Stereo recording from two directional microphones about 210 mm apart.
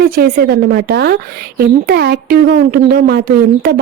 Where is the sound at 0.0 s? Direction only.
45° right (ahead or behind).